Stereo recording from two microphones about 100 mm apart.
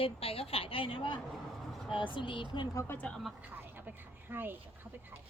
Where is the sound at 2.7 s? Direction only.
30° left (ahead or behind).